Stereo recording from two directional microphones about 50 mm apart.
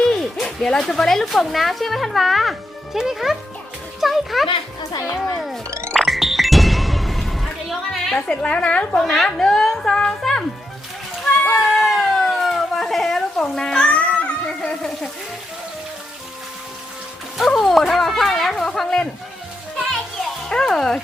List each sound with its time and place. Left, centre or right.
0.0 s speech: centre
5.9 s music: centre
8.1 s a woman's voice: centre
9.0 s speech: centre
11.6 s a sound: centre
13.4 s speech: centre
13.9 s a sound: left
17.3 s speech: centre
20.5 s speech: centre